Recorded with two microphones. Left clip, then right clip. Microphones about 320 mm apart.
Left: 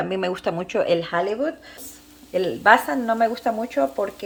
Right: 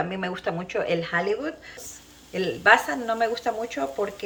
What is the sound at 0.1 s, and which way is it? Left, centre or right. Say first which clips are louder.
Speech: left 5 dB; left.